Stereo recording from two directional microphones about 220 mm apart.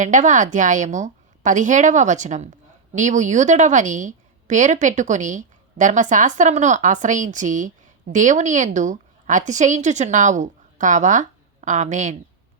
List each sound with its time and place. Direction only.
0.0 s a woman's voice: 35° right (ahead or behind)